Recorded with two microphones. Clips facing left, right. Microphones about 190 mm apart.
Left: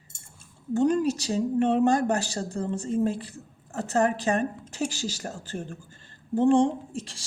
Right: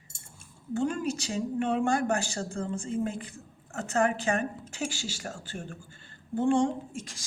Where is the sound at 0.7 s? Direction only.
40° left (ahead or behind).